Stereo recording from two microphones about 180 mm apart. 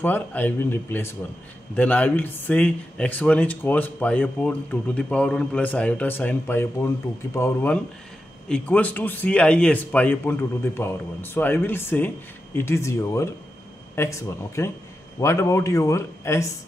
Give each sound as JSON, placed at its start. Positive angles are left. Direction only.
{"t": 0.0, "sound": "speech", "side_deg": 10}